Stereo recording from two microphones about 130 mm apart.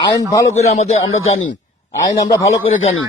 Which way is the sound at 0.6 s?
55° left (ahead or behind).